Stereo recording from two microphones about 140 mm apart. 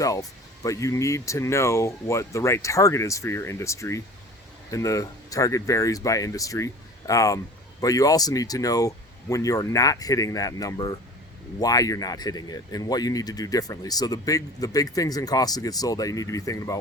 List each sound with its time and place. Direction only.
0.0 s speech: 25° left (ahead or behind)